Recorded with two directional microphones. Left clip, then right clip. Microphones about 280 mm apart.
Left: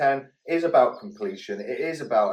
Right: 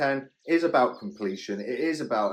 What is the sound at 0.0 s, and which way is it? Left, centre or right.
Speech, right.